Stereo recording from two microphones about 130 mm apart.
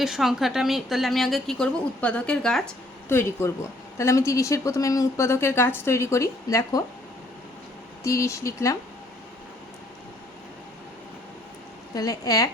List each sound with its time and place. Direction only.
0.0 s a woman's voice: 5° right (ahead or behind)
3.1 s a woman's voice: 20° left (ahead or behind)
8.0 s a woman's voice: 25° left (ahead or behind)
11.9 s a woman's voice: 30° left (ahead or behind)